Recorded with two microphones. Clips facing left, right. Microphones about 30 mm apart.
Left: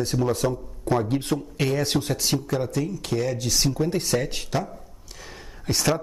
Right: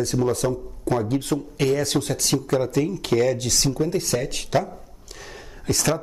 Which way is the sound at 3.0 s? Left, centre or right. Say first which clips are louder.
Right 8 dB; right.